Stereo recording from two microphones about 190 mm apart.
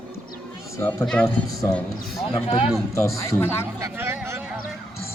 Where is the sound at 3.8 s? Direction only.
15° right (ahead or behind).